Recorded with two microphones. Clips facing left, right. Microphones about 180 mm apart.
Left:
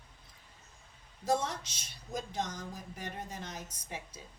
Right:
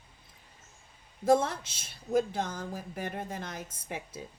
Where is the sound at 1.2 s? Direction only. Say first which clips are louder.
Right 7 dB; 55° right (ahead or behind).